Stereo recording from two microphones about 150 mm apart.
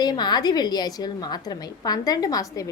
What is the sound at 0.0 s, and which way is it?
A woman's voice, 30° left (ahead or behind).